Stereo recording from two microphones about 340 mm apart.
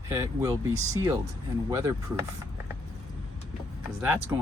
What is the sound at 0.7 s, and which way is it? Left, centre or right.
Speech, right.